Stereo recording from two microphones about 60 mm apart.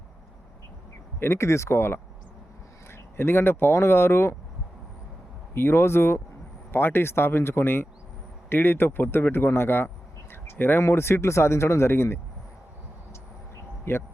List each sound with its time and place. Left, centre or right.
1.2 s speech: left
3.2 s a man's voice: left
5.5 s a man's voice: left
13.9 s a man's voice: left